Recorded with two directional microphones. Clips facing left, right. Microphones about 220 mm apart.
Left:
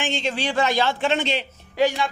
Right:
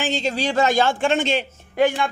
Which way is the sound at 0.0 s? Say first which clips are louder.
Right 3 dB; 40° right (ahead or behind).